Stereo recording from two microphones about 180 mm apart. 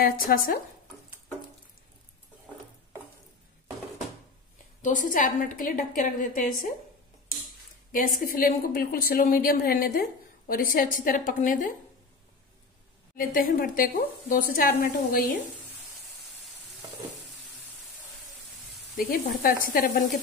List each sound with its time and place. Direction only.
0.0 s a woman's voice: 50° left (ahead or behind)
4.8 s a woman's voice: 45° left (ahead or behind)
8.2 s a woman's voice: 50° left (ahead or behind)
13.1 s a woman's voice: 50° left (ahead or behind)
18.9 s a woman's voice: 55° left (ahead or behind)